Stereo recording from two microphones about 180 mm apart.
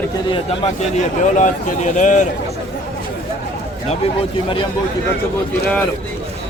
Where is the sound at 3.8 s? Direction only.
30° left (ahead or behind).